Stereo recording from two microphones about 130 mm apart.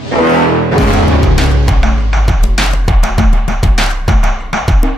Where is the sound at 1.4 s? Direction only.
Centre (ahead or behind).